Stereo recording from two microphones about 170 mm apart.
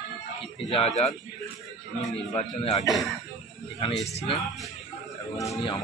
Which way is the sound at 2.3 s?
40° left (ahead or behind).